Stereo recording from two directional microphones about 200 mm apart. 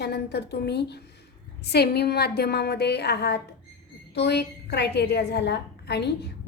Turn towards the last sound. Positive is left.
turn(degrees=55)  # may be behind; listen again after turning